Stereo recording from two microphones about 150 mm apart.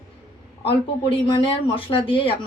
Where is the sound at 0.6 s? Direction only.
35° left (ahead or behind).